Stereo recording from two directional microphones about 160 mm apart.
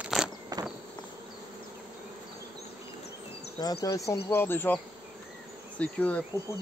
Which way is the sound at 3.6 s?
20° left (ahead or behind).